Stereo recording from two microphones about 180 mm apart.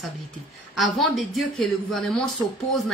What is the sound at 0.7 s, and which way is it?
Speech, centre (ahead or behind).